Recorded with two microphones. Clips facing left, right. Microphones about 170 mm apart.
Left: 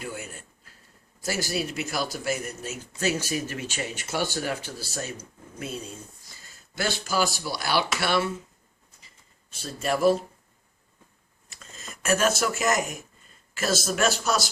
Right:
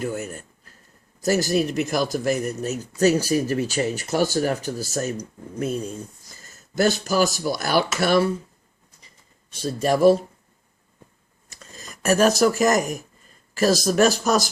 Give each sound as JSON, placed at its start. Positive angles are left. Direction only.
{"t": 0.0, "sound": "speech", "side_deg": -45}
{"t": 9.6, "sound": "speech", "side_deg": -35}
{"t": 11.6, "sound": "speech", "side_deg": -40}